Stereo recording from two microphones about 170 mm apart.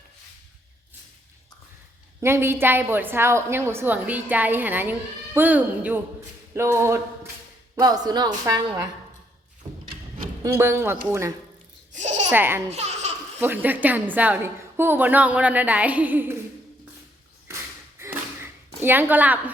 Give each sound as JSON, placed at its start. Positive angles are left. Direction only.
{"t": 2.2, "sound": "a woman's voice", "side_deg": -15}
{"t": 10.4, "sound": "a woman's voice", "side_deg": -15}
{"t": 11.9, "sound": "babbling", "side_deg": -45}
{"t": 12.3, "sound": "a woman's voice", "side_deg": -10}
{"t": 12.7, "sound": "laughter", "side_deg": -40}
{"t": 13.4, "sound": "a woman's voice", "side_deg": -10}
{"t": 18.0, "sound": "a sound", "side_deg": -15}
{"t": 18.8, "sound": "a woman's voice", "side_deg": -10}